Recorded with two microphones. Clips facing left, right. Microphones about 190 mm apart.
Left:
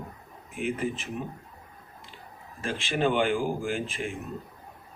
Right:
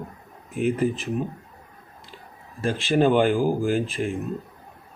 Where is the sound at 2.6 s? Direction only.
40° right (ahead or behind).